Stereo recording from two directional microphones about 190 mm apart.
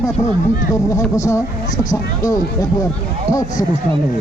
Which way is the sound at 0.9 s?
15° left (ahead or behind).